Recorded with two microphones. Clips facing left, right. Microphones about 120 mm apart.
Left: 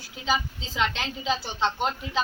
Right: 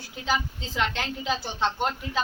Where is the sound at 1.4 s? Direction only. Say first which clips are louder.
Even; 15° right (ahead or behind).